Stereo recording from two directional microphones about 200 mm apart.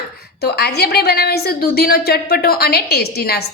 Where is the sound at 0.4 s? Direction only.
55° left (ahead or behind).